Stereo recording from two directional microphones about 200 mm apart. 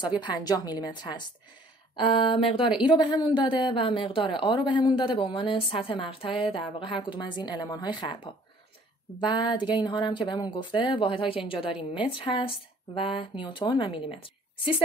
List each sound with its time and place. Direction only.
0.2 s a woman's voice: 20° left (ahead or behind)